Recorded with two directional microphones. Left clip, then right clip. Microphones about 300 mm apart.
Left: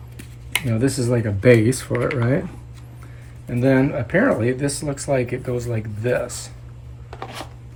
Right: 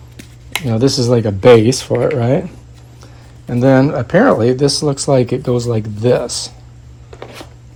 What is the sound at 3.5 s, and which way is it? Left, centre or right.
Speech, centre.